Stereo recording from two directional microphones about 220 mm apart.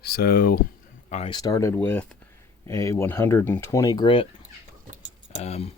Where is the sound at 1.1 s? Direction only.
25° left (ahead or behind).